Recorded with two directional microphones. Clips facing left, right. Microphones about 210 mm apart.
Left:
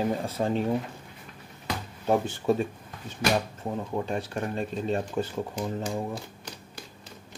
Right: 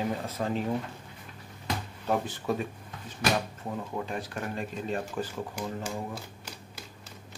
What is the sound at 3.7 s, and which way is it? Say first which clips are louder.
Speech: left 4 dB; 30° left (ahead or behind).